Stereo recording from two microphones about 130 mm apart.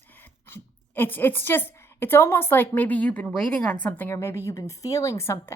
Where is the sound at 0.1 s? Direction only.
15° left (ahead or behind).